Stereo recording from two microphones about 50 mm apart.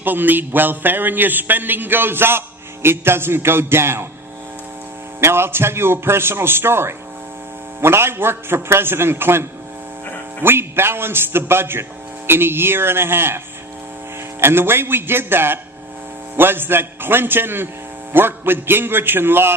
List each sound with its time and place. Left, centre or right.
0.0 s a man's voice: right
5.2 s a man's voice: right
14.4 s a man's voice: right